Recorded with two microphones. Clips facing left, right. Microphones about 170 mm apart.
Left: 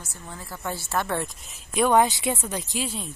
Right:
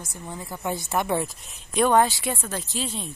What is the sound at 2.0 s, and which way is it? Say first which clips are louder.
Speech: left 1 dB; 20° left (ahead or behind).